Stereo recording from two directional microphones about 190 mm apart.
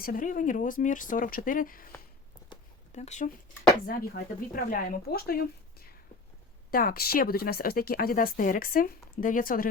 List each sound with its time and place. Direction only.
0.0 s speech: 45° left (ahead or behind)
2.9 s speech: 35° left (ahead or behind)
3.8 s speech: 50° left (ahead or behind)
6.7 s speech: 50° left (ahead or behind)